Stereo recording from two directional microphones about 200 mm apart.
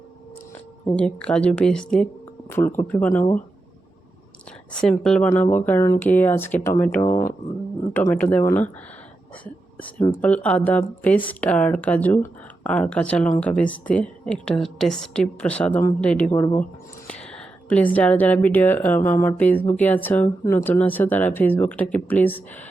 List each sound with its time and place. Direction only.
0.9 s a woman's voice: 5° left (ahead or behind)
4.8 s a woman's voice: 5° left (ahead or behind)
7.1 s speech: 45° left (ahead or behind)
7.9 s a woman's voice: 10° left (ahead or behind)
9.3 s whispering: 5° left (ahead or behind)
10.1 s a woman's voice: 5° left (ahead or behind)